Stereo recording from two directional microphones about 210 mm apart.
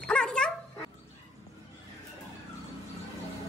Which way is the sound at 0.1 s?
5° left (ahead or behind).